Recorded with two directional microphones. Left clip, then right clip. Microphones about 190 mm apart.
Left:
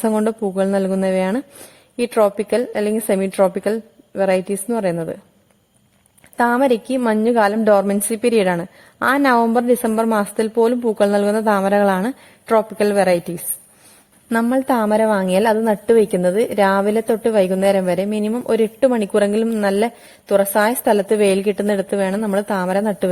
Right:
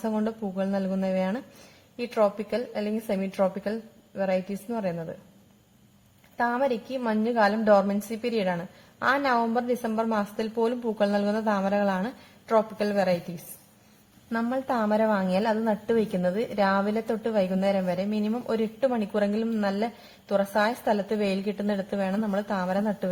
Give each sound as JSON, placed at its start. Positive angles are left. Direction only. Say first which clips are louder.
{"t": 0.0, "sound": "a woman's voice", "louder": "left 11 dB", "side_deg": 45}
{"t": 6.3, "sound": "a woman's voice", "louder": "left 10 dB", "side_deg": 50}